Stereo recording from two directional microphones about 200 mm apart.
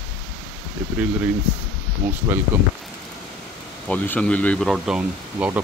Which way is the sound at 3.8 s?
10° left (ahead or behind).